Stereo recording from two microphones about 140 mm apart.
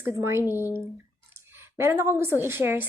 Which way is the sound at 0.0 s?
20° right (ahead or behind).